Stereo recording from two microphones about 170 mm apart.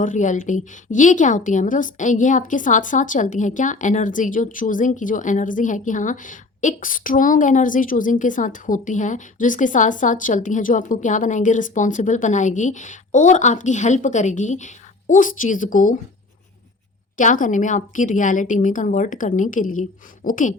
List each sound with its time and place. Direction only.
0.0 s a woman's voice: 45° left (ahead or behind)
17.2 s a woman's voice: 50° left (ahead or behind)